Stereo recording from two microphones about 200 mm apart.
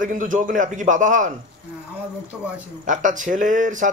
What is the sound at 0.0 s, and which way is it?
Speech, 40° right (ahead or behind).